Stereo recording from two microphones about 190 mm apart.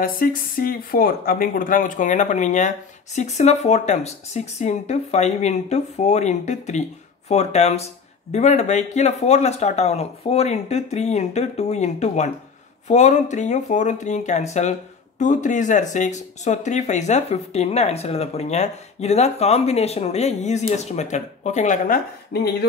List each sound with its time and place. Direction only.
0.0 s speech: 50° left (ahead or behind)